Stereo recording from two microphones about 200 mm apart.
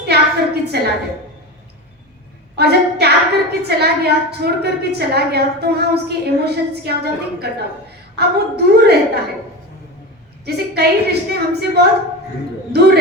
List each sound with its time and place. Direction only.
0.0 s a sound: 55° right (ahead or behind)
2.6 s a woman's voice: 55° right (ahead or behind)
10.4 s a woman's voice: 55° right (ahead or behind)